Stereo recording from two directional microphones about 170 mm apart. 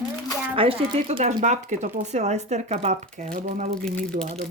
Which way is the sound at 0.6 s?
30° right (ahead or behind).